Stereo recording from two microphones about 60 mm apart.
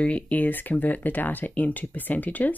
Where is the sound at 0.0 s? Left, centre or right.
Left.